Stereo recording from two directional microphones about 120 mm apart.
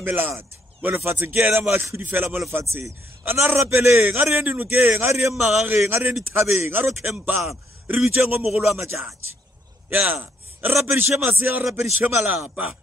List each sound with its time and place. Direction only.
0.0 s a man's voice: 15° right (ahead or behind)